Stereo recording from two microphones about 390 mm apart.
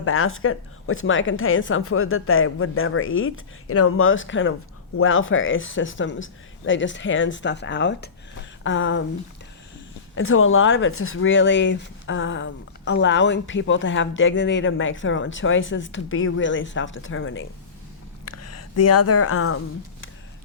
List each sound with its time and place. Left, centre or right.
0.0 s a woman's voice: left
10.2 s speech: left